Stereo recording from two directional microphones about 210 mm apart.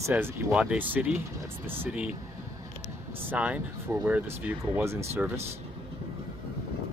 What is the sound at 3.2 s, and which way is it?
Speech, 5° right (ahead or behind).